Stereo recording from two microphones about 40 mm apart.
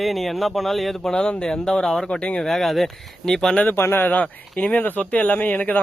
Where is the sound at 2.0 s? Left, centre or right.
Left.